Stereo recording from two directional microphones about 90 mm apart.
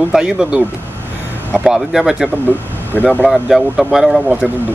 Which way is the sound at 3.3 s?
5° right (ahead or behind).